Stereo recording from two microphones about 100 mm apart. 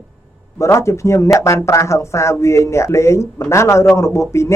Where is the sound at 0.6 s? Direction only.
30° left (ahead or behind).